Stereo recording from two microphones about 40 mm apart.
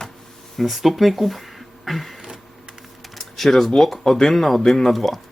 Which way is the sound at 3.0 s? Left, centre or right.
Centre.